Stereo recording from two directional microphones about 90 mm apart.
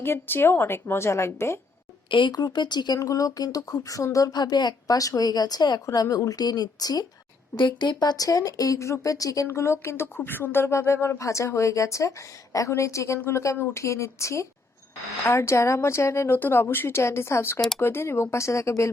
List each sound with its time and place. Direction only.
0.0 s a woman's voice: 25° left (ahead or behind)
2.0 s speech: 60° left (ahead or behind)
2.3 s speech: 50° left (ahead or behind)
3.0 s speech: 40° left (ahead or behind)
7.5 s a woman's voice: 60° left (ahead or behind); by 18.9 s 35° left (ahead or behind)